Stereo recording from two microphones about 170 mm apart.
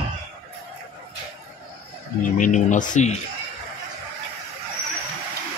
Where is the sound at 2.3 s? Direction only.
50° left (ahead or behind).